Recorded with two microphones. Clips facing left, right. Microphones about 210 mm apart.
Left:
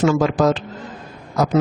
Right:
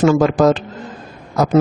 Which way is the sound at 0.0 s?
50° right (ahead or behind).